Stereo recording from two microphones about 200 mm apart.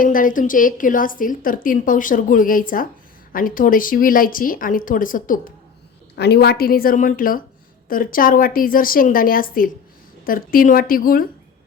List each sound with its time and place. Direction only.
0.0 s a woman's voice: 45° left (ahead or behind)
6.1 s a woman's voice: 55° left (ahead or behind)